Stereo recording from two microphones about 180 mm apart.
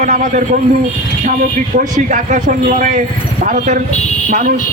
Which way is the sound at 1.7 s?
45° right (ahead or behind).